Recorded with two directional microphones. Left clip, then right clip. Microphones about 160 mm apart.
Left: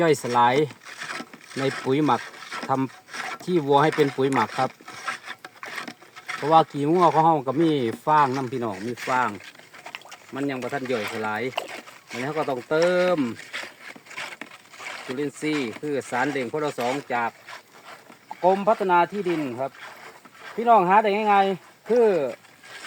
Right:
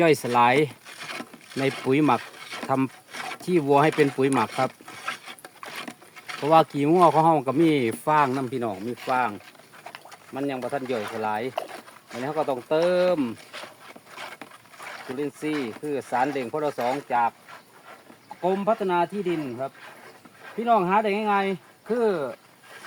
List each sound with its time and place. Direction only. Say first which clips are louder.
0.0 s speech: even; 10° left (ahead or behind)
8.4 s speech: even; 50° left (ahead or behind)
18.4 s speech: left 4 dB; 25° left (ahead or behind)
20.7 s speech: left 4 dB; 25° left (ahead or behind)
21.8 s speech: left 5 dB; 45° left (ahead or behind)